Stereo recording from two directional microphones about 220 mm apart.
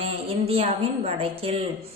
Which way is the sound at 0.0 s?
25° right (ahead or behind).